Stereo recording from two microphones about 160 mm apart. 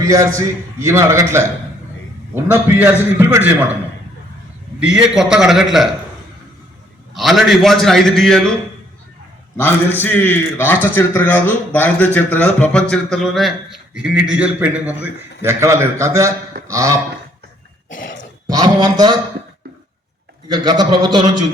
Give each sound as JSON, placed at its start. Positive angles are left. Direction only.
{"t": 0.0, "sound": "a man's voice", "side_deg": -20}
{"t": 4.8, "sound": "speech", "side_deg": -5}
{"t": 7.1, "sound": "speech", "side_deg": 0}
{"t": 9.6, "sound": "a man's voice", "side_deg": 15}
{"t": 18.4, "sound": "a man's voice", "side_deg": -25}
{"t": 20.5, "sound": "a man's voice", "side_deg": -25}